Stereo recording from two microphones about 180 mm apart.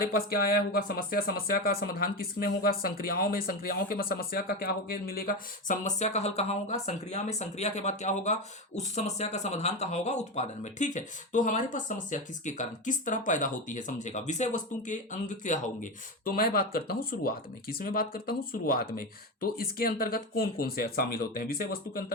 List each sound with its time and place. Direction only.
0.0 s speech: 55° left (ahead or behind)